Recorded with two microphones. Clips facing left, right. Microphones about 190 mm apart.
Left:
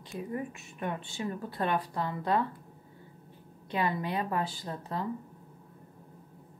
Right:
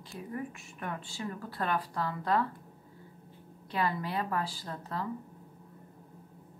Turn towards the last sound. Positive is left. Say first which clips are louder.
# left 2 dB
turn(degrees=20)  # may be behind; listen again after turning